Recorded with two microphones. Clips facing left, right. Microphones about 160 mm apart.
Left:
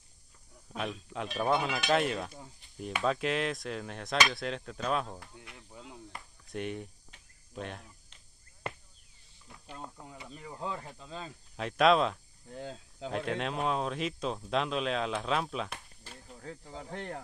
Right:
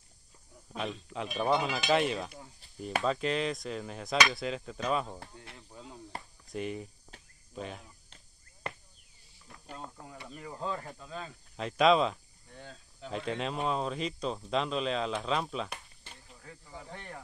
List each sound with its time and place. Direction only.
0.7 s speech: centre (ahead or behind)
7.1 s cricket: 35° right (ahead or behind)
7.5 s speech: centre (ahead or behind)
9.5 s speech: centre (ahead or behind)
10.6 s speech: 15° left (ahead or behind)
11.5 s speech: centre (ahead or behind)
12.5 s speech: 90° left
13.1 s speech: centre (ahead or behind)
16.3 s speech: 70° left (ahead or behind)